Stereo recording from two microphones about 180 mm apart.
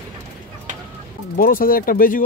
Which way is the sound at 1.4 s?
50° left (ahead or behind).